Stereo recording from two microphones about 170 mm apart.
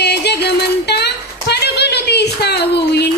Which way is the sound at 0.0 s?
75° left (ahead or behind).